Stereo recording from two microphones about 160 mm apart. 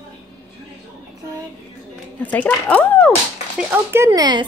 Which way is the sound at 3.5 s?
15° right (ahead or behind).